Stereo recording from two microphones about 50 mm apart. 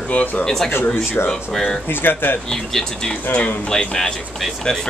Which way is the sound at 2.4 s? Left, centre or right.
Centre.